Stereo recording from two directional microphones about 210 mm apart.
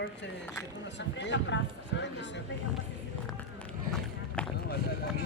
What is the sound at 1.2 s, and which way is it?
Speech, 60° left (ahead or behind).